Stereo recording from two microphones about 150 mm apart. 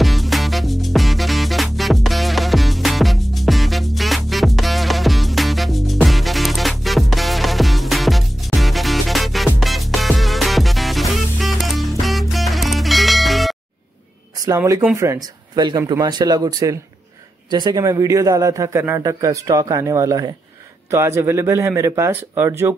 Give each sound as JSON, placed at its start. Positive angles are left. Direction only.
{"t": 0.0, "sound": "music", "side_deg": 0}
{"t": 14.4, "sound": "a man's voice", "side_deg": -20}